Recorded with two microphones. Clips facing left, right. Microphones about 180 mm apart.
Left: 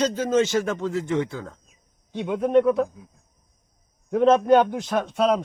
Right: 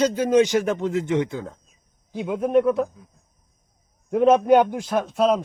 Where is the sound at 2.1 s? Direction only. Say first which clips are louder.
Even; 5° right (ahead or behind).